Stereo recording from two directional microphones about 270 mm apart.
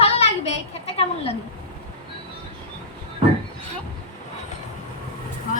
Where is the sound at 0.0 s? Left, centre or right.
Left.